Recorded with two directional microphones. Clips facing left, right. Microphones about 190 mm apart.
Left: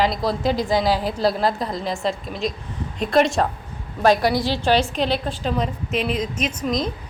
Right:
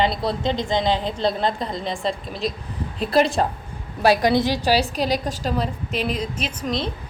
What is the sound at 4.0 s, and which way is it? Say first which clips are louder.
Speech: even; 15° right (ahead or behind).